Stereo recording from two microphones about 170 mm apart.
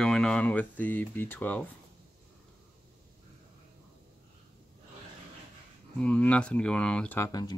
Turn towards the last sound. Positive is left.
turn(degrees=20)  # may be behind; listen again after turning